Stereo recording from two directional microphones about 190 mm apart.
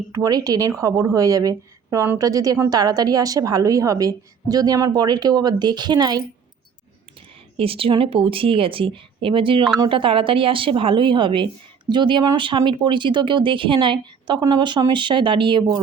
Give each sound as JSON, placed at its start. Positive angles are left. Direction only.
{"t": 0.1, "sound": "a woman's voice", "side_deg": -20}
{"t": 7.5, "sound": "a woman's voice", "side_deg": -30}